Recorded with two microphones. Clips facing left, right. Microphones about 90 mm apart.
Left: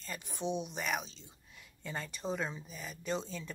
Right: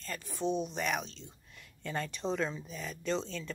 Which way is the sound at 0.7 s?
5° left (ahead or behind).